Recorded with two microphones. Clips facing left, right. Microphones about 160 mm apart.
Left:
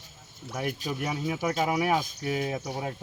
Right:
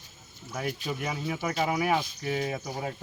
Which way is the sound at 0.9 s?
5° left (ahead or behind).